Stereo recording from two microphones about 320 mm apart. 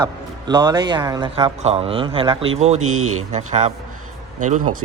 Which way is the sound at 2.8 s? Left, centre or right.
Right.